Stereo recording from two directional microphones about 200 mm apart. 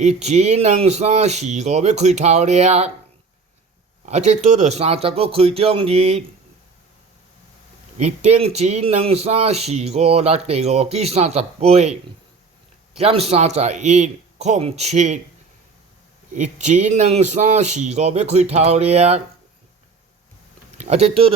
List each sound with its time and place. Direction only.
0.0 s speech: 35° right (ahead or behind)
4.0 s speech: 35° right (ahead or behind)
7.9 s speech: 35° right (ahead or behind)
16.3 s speech: 35° right (ahead or behind)
20.7 s speech: 35° right (ahead or behind)